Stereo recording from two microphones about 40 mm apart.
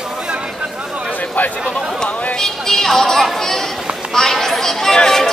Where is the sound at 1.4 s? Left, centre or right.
Left.